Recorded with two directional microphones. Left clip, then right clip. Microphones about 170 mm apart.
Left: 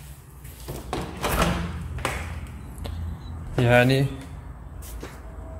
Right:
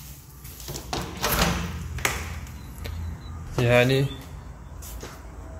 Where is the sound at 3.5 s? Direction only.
15° left (ahead or behind).